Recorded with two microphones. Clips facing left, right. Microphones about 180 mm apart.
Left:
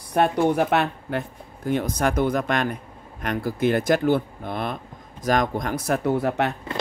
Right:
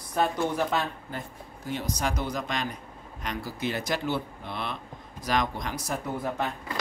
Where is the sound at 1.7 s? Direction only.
55° left (ahead or behind).